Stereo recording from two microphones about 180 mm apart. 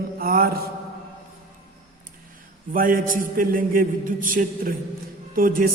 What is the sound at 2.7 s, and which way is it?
Music, 50° right (ahead or behind).